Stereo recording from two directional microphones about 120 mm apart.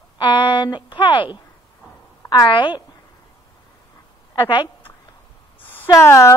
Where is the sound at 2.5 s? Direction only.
40° left (ahead or behind).